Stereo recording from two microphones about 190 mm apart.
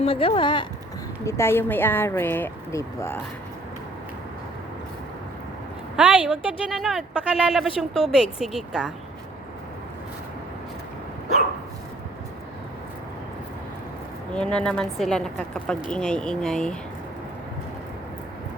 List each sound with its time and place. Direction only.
0.0 s speech: 30° left (ahead or behind)
1.2 s speech: 15° left (ahead or behind)
6.0 s a woman's voice: 5° right (ahead or behind)
14.3 s a woman's voice: 5° left (ahead or behind)